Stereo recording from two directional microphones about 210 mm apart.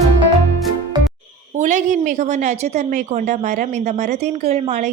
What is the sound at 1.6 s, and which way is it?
A woman's voice, 35° right (ahead or behind).